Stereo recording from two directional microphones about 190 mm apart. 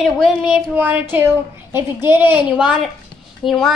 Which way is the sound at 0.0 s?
5° right (ahead or behind).